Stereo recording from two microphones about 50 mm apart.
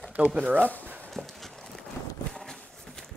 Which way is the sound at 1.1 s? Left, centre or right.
Centre.